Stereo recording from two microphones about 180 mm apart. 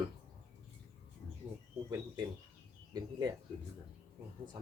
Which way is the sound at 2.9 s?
20° right (ahead or behind).